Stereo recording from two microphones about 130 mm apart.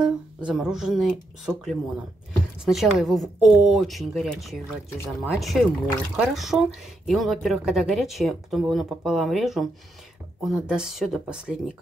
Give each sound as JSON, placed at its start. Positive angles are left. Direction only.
{"t": 0.0, "sound": "speech", "side_deg": -5}
{"t": 4.8, "sound": "speech", "side_deg": 20}
{"t": 5.4, "sound": "speech", "side_deg": 0}